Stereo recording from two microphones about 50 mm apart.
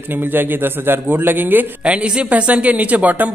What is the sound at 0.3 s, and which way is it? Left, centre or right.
A man's voice, right.